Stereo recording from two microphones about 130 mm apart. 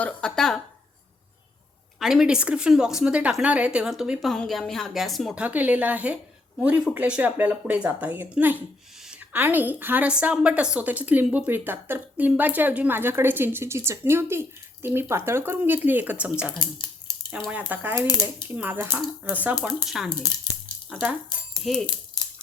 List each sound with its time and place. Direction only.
0.0 s speech: 5° left (ahead or behind)
2.0 s a woman's voice: 5° right (ahead or behind)
20.1 s speech: 30° left (ahead or behind)
20.9 s a woman's voice: 10° right (ahead or behind)
21.5 s a sound: centre (ahead or behind)